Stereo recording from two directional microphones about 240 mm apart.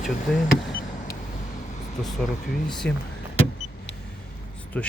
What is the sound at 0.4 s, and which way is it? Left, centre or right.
Vehicle, left.